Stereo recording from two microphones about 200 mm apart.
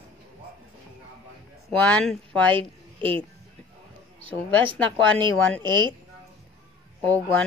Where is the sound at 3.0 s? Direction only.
25° right (ahead or behind).